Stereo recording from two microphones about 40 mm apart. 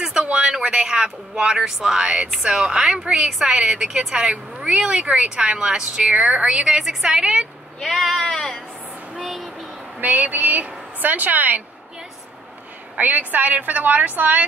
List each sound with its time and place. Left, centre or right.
0.2 s a sound: right
0.6 s a man's voice: centre
5.5 s a woman's voice: centre
7.8 s speech: centre
9.1 s a sound: centre
9.9 s a woman's voice: right
12.9 s a woman's voice: right